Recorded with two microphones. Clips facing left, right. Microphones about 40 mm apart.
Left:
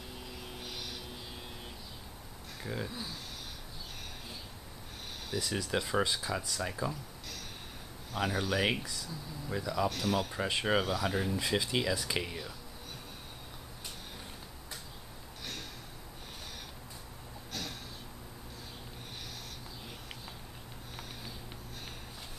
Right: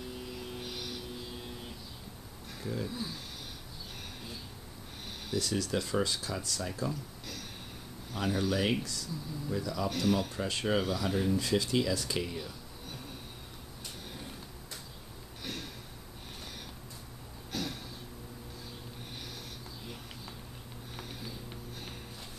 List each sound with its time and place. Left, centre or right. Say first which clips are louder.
0.2 s vehicle: right 3 dB; centre
2.6 s speech: right 2 dB; centre
5.3 s speech: right 1 dB; centre
8.1 s speech: right 1 dB; centre
9.8 s speech: right 2 dB; centre
10.3 s speech: left 1 dB; centre
17.5 s a sound: right 4 dB; centre